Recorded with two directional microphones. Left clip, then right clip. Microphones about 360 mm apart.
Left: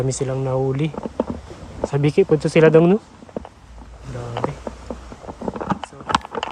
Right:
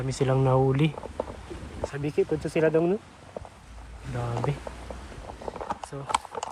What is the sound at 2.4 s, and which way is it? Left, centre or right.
Speech, left.